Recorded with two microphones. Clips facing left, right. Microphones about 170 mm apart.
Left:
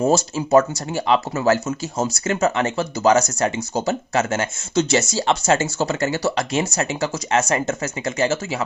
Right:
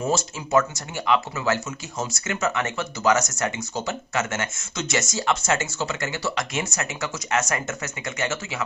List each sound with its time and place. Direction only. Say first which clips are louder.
0.0 s speech: left 7 dB; 35° left (ahead or behind)